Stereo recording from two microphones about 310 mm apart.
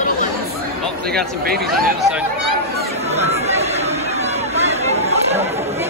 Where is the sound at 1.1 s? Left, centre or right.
Right.